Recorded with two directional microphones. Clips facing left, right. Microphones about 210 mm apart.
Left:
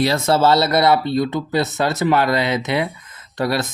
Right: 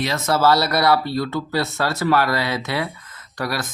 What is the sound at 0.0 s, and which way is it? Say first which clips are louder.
Speech: left 3 dB; 30° left (ahead or behind).